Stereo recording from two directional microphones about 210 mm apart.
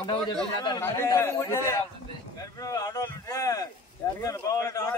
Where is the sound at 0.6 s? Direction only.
15° left (ahead or behind).